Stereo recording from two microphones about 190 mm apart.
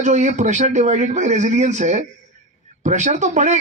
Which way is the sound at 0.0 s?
40° right (ahead or behind).